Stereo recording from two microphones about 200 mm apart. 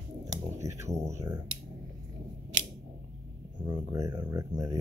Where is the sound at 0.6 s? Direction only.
15° right (ahead or behind).